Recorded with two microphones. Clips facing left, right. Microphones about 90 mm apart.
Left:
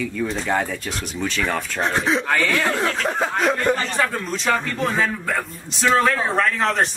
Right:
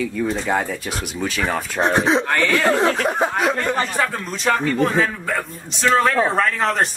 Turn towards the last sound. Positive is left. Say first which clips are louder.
# right 1 dB
turn(degrees=0)  # may be behind; listen again after turning